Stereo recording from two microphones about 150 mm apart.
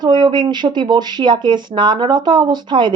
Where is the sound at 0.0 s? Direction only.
30° right (ahead or behind).